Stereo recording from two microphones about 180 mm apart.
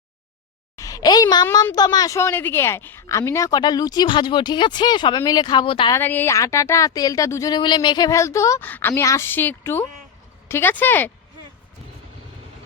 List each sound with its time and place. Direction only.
0.8 s a child's voice: 20° left (ahead or behind)
5.9 s speech: 10° left (ahead or behind)